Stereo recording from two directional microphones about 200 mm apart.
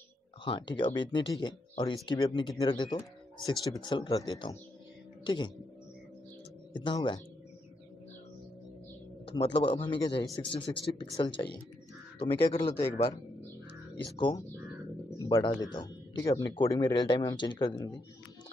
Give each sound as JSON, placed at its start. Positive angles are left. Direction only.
{"t": 0.5, "sound": "speech", "side_deg": 25}
{"t": 6.7, "sound": "speech", "side_deg": 25}
{"t": 9.2, "sound": "speech", "side_deg": 25}
{"t": 14.1, "sound": "speech", "side_deg": 25}